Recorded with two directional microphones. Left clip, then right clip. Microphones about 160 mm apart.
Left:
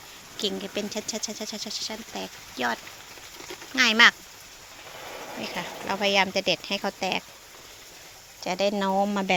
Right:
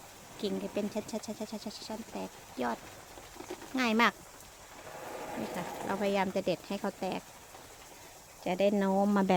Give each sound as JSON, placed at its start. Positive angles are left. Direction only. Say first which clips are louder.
{"t": 0.3, "sound": "speech", "louder": "left 6 dB", "side_deg": 0}
{"t": 3.8, "sound": "speech", "louder": "left 10 dB", "side_deg": -10}
{"t": 5.4, "sound": "speech", "louder": "left 7 dB", "side_deg": -5}
{"t": 8.4, "sound": "speech", "louder": "left 4 dB", "side_deg": -20}